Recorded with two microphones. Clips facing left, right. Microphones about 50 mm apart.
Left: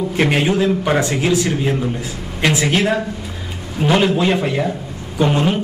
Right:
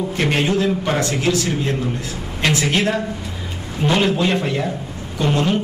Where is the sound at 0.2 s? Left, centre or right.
Centre.